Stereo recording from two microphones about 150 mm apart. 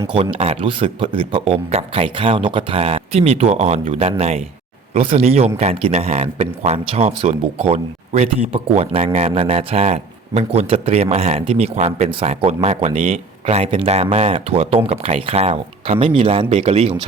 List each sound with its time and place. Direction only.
0.3 s a man's voice: 40° right (ahead or behind)